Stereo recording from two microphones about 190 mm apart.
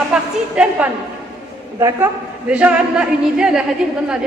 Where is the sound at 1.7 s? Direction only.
15° right (ahead or behind).